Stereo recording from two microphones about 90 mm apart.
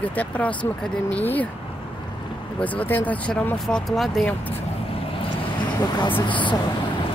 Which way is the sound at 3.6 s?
5° left (ahead or behind).